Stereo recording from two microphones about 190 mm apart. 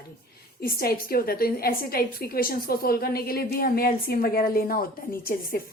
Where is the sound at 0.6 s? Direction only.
50° left (ahead or behind).